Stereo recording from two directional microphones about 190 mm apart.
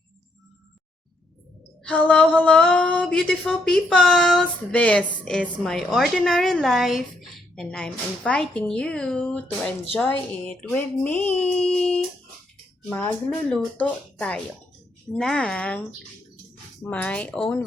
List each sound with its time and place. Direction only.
1.8 s speech: 5° left (ahead or behind)
16.8 s speech: 5° left (ahead or behind)